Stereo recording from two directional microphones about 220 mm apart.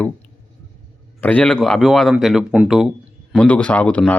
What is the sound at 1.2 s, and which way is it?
A man's voice, 5° left (ahead or behind).